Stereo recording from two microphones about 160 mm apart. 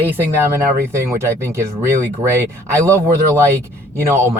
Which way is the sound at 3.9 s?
15° right (ahead or behind).